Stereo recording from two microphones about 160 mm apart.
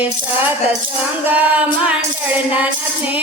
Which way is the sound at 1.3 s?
10° right (ahead or behind).